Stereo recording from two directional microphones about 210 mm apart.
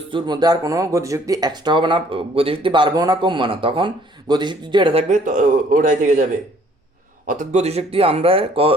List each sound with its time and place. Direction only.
0.1 s speech: 20° right (ahead or behind); by 6.2 s 35° right (ahead or behind)
7.3 s speech: 35° right (ahead or behind)